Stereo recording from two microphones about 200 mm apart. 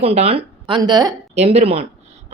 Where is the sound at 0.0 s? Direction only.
30° right (ahead or behind).